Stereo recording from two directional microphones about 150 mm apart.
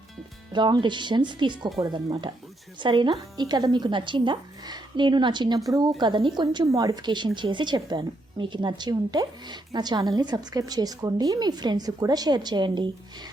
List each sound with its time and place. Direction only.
0.5 s a woman's voice: 30° right (ahead or behind)